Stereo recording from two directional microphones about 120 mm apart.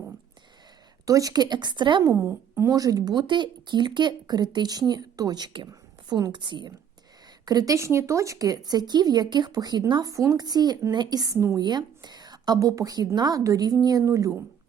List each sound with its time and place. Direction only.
1.0 s speech: 30° right (ahead or behind)
2.0 s speech: 20° right (ahead or behind)
11.6 s speech: 35° right (ahead or behind)